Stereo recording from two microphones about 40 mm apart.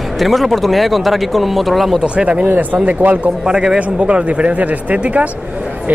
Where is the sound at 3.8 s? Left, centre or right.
Right.